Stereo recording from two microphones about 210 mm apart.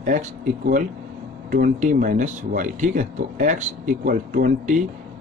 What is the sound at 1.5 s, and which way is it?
Speech, 40° right (ahead or behind).